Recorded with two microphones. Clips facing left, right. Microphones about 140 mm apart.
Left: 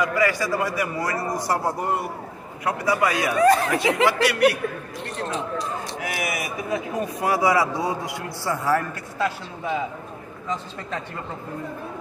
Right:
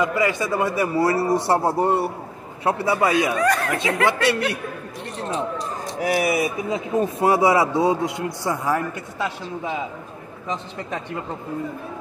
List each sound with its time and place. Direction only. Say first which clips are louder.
0.0 s a man's voice: right 1 dB; 25° right (ahead or behind)
3.3 s speech: left 3 dB; 25° left (ahead or behind)
4.0 s a man's voice: left 2 dB; 25° right (ahead or behind)
5.9 s a man's voice: right 12 dB; 35° right (ahead or behind); by 8.8 s 20° right (ahead or behind)